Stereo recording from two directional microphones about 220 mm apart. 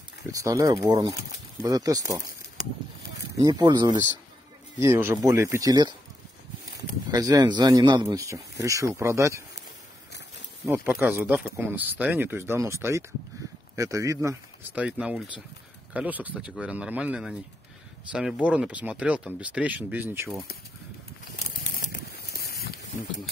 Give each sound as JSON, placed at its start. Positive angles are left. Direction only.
{"t": 0.3, "sound": "speech", "side_deg": -15}
{"t": 3.3, "sound": "speech", "side_deg": -20}
{"t": 7.1, "sound": "speech", "side_deg": -15}
{"t": 10.7, "sound": "speech", "side_deg": -10}
{"t": 21.5, "sound": "a sound", "side_deg": 40}